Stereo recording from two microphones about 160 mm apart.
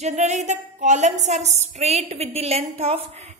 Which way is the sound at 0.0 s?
45° right (ahead or behind).